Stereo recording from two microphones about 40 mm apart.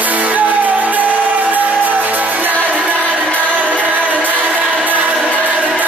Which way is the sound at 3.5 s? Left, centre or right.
Right.